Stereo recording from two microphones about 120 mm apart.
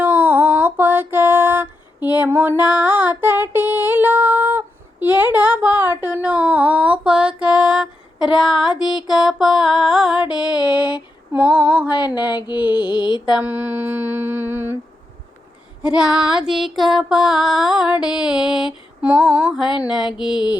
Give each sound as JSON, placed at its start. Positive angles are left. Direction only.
{"t": 0.0, "sound": "a sound", "side_deg": -15}
{"t": 9.0, "sound": "music", "side_deg": -5}
{"t": 11.3, "sound": "humming", "side_deg": -10}
{"t": 11.9, "sound": "a sound", "side_deg": 35}
{"t": 13.3, "sound": "humming", "side_deg": -15}
{"t": 15.8, "sound": "music", "side_deg": -10}